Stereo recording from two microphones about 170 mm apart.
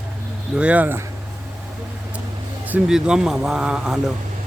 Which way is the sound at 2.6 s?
5° right (ahead or behind).